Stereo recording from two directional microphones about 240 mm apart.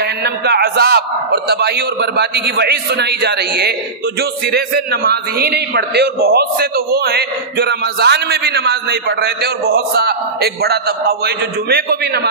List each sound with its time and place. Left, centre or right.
0.0 s a man's voice: right
9.8 s a man's voice: right